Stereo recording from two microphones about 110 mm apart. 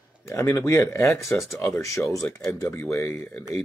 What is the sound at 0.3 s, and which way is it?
Speech, 25° left (ahead or behind).